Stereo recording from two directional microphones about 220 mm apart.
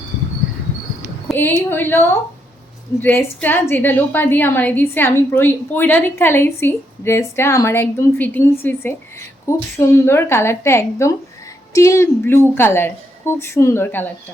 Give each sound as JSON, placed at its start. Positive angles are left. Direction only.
{"t": 1.3, "sound": "a woman's voice", "side_deg": 10}